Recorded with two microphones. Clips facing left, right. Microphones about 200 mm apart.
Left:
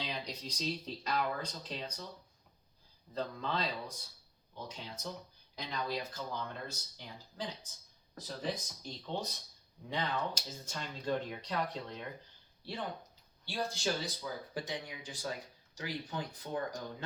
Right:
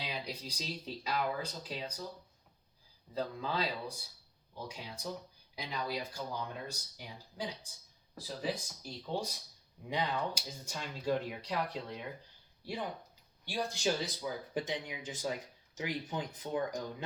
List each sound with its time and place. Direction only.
0.0 s speech: 10° right (ahead or behind)
3.2 s speech: 5° right (ahead or behind)